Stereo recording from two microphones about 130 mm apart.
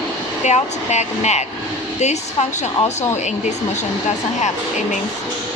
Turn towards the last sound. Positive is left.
turn(degrees=65)  # may be behind; listen again after turning